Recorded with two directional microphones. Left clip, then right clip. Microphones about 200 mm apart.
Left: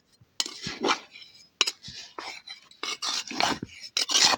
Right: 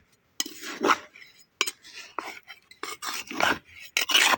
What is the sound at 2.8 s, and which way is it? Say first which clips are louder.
Dishes: left 3 dB; centre (ahead or behind).